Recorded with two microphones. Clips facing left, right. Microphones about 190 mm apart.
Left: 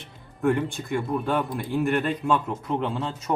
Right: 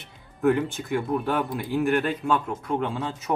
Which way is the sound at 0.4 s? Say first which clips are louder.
Right 1 dB; centre (ahead or behind).